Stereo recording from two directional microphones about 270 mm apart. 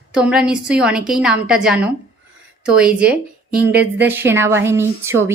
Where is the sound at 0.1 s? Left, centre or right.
Centre.